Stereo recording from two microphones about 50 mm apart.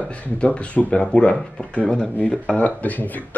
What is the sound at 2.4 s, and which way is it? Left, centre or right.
Speech, left.